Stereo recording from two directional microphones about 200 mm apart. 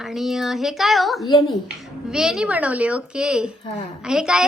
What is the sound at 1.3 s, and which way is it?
Speech, 25° left (ahead or behind).